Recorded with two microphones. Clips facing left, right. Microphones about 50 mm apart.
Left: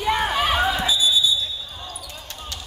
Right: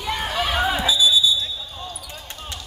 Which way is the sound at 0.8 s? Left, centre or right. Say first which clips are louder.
Right 2 dB; left.